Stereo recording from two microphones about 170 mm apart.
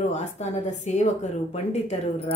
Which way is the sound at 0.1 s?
40° left (ahead or behind).